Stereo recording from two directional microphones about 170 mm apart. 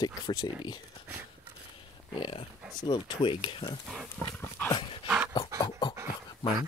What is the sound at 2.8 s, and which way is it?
Speech, 30° left (ahead or behind).